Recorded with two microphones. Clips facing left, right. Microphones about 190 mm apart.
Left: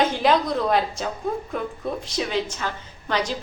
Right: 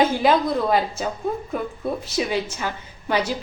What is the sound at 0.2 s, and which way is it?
A woman's voice, 5° right (ahead or behind).